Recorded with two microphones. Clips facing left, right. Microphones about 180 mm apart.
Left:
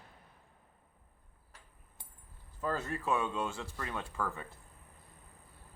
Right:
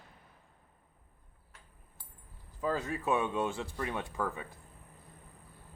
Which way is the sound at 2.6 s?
10° right (ahead or behind).